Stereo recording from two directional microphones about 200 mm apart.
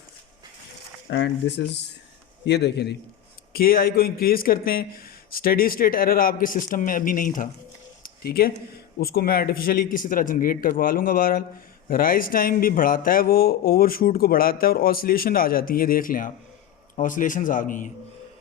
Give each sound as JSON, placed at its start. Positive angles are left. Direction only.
{"t": 1.0, "sound": "speech", "side_deg": 60}
{"t": 8.0, "sound": "a sound", "side_deg": 50}
{"t": 9.0, "sound": "a man's voice", "side_deg": 50}